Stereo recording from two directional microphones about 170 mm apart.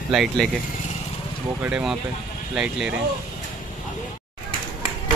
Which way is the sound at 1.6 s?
5° right (ahead or behind).